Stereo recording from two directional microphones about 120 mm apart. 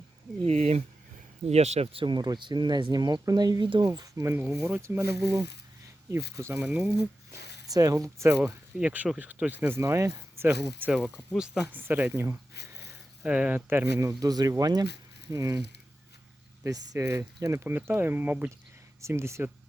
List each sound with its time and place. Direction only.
0.4 s speech: 65° right (ahead or behind); by 4.4 s 30° right (ahead or behind)
4.6 s speech: 15° right (ahead or behind)
6.5 s speech: 10° right (ahead or behind)
7.7 s speech: 30° right (ahead or behind)
8.4 s speech: 10° right (ahead or behind)
11.0 s speech: centre (ahead or behind)
11.7 s speech: 15° right (ahead or behind)
13.2 s speech: 10° right (ahead or behind); by 15.6 s 30° right (ahead or behind)
16.6 s speech: 30° right (ahead or behind)